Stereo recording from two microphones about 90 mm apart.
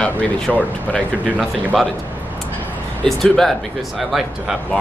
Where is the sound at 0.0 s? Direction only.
15° left (ahead or behind).